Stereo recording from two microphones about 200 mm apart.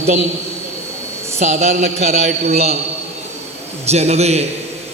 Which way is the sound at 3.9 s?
35° right (ahead or behind).